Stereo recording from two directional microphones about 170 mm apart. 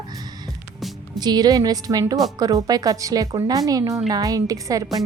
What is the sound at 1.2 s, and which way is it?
A woman's voice, 25° right (ahead or behind).